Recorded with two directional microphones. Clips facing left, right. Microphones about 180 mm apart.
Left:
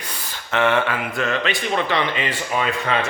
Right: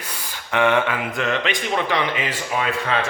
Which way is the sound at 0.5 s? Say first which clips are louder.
Right 1 dB; 15° right (ahead or behind).